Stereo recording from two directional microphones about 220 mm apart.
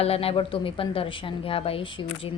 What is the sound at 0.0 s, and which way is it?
A woman's voice, 25° left (ahead or behind).